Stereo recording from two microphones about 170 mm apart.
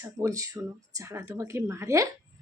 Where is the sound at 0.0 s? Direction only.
20° right (ahead or behind).